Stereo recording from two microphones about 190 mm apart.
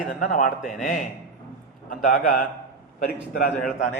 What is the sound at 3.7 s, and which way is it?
Speech, 40° left (ahead or behind).